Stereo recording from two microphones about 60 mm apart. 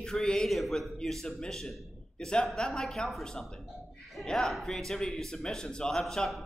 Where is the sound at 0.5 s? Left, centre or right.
Centre.